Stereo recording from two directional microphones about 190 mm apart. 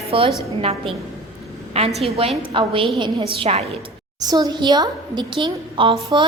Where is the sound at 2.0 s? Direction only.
30° right (ahead or behind).